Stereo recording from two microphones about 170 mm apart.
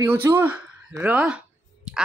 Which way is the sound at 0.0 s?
15° right (ahead or behind).